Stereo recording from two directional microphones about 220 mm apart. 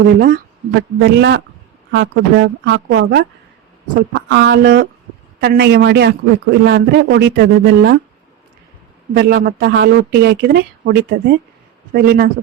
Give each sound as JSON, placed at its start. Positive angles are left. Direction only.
{"t": 0.2, "sound": "speech", "side_deg": -40}
{"t": 0.7, "sound": "a man's voice", "side_deg": -50}
{"t": 9.1, "sound": "a man's voice", "side_deg": -45}